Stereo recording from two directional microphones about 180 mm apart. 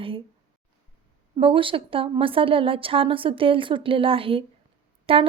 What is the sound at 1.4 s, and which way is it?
A woman's voice, 30° right (ahead or behind).